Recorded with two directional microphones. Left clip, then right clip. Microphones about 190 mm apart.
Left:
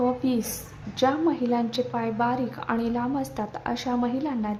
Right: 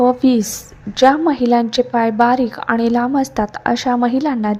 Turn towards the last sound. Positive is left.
turn(degrees=-40)  # may be behind; listen again after turning